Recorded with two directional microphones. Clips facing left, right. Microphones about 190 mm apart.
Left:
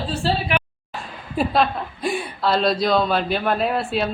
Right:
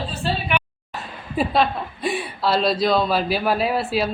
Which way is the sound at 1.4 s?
Centre (ahead or behind).